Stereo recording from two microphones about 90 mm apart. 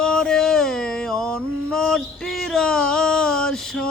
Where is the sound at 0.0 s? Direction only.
5° left (ahead or behind).